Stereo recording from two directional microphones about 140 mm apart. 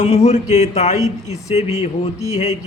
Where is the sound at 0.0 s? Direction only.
50° left (ahead or behind).